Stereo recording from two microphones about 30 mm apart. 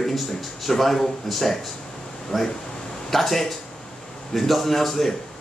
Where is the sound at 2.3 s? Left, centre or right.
Centre.